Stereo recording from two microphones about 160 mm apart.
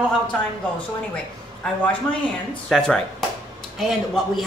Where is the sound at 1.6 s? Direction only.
10° left (ahead or behind).